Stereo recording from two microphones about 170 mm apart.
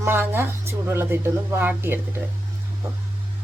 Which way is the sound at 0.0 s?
10° right (ahead or behind).